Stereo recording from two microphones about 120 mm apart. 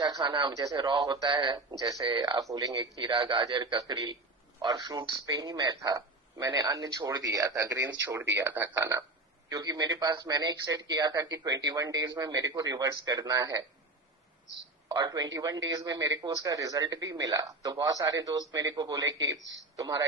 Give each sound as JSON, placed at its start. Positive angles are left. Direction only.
{"t": 0.0, "sound": "speech", "side_deg": -35}
{"t": 1.3, "sound": "a man's voice", "side_deg": -40}
{"t": 2.1, "sound": "a man's voice", "side_deg": -40}
{"t": 3.7, "sound": "a man's voice", "side_deg": -30}
{"t": 7.7, "sound": "speech", "side_deg": -15}
{"t": 9.5, "sound": "a man's voice", "side_deg": -30}
{"t": 14.9, "sound": "a man's voice", "side_deg": -35}